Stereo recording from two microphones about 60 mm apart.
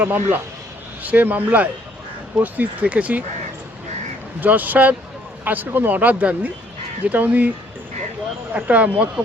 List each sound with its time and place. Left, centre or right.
0.0 s speech: right
4.4 s speech: right
8.5 s speech: right